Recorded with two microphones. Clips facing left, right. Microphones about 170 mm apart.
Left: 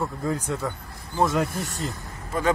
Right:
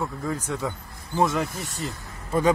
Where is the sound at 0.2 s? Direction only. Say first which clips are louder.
Left 1 dB; centre (ahead or behind).